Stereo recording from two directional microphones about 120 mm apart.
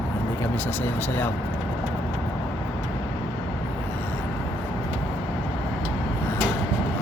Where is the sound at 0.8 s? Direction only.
15° left (ahead or behind).